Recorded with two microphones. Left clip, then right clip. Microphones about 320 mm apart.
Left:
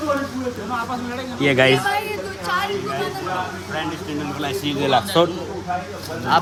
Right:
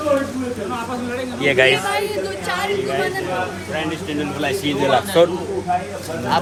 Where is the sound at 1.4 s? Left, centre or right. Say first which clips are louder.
Right 1 dB; left.